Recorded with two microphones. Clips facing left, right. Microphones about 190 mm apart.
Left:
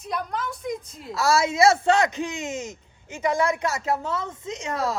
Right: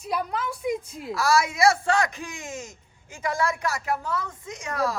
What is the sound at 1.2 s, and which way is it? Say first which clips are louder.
A woman's voice: left 2 dB; 25° left (ahead or behind).